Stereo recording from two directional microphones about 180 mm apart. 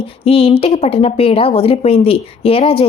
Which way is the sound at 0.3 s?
30° left (ahead or behind).